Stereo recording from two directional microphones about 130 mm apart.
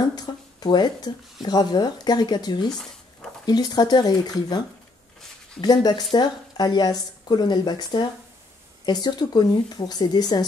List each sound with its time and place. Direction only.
0.0 s speech: 30° left (ahead or behind)